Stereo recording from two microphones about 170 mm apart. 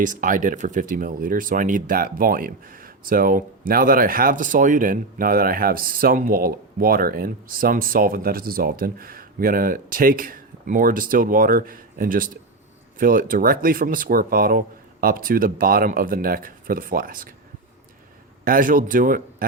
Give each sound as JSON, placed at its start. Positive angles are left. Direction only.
{"t": 0.0, "sound": "speech", "side_deg": -50}
{"t": 18.4, "sound": "speech", "side_deg": -55}